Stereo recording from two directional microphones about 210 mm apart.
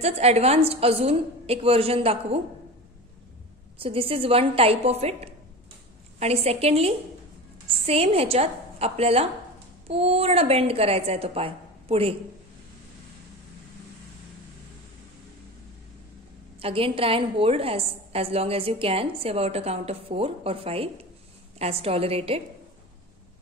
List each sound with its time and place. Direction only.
0.0 s a woman's voice: 30° right (ahead or behind)
3.7 s a woman's voice: 25° right (ahead or behind)
16.5 s a woman's voice: 25° right (ahead or behind)